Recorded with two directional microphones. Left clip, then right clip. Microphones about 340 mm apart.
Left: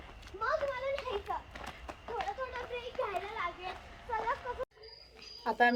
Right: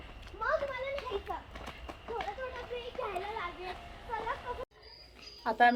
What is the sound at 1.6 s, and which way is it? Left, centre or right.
Run, centre.